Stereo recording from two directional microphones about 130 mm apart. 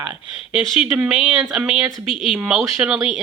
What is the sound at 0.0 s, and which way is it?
Speech, 10° right (ahead or behind).